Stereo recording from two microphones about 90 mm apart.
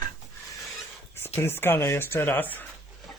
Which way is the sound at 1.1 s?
25° left (ahead or behind).